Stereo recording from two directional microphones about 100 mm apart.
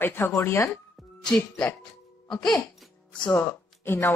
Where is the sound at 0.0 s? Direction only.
20° left (ahead or behind).